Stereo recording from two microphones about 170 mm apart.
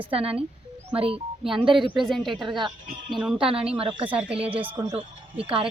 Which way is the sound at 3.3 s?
35° right (ahead or behind).